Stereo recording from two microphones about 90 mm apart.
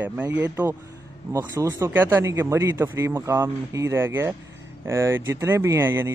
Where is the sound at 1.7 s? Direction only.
25° right (ahead or behind).